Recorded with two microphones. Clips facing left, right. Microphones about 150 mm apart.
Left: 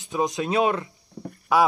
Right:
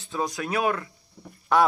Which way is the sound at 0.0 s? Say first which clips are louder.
Left 4 dB; 20° left (ahead or behind).